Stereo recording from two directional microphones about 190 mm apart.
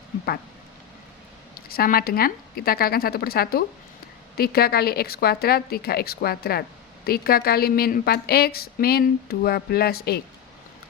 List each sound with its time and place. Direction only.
1.7 s a woman's voice: 50° left (ahead or behind)